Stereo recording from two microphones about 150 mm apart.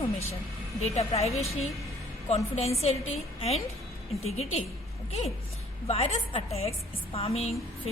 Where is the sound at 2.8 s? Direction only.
45° left (ahead or behind).